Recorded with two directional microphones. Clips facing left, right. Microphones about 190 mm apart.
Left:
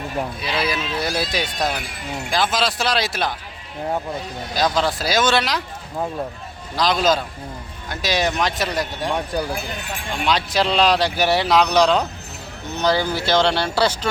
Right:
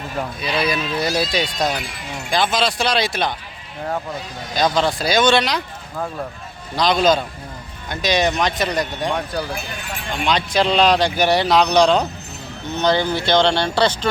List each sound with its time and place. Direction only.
0.2 s speech: 5° left (ahead or behind)
4.5 s speech: 5° left (ahead or behind)
6.7 s speech: centre (ahead or behind)
10.2 s speech: 5° left (ahead or behind)